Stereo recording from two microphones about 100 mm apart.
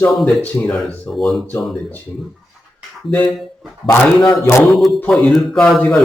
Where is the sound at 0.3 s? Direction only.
10° left (ahead or behind).